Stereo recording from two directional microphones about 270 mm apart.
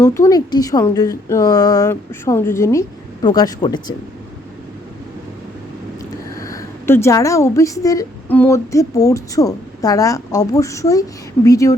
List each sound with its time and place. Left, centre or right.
0.0 s a woman's voice: centre
6.3 s a woman's voice: centre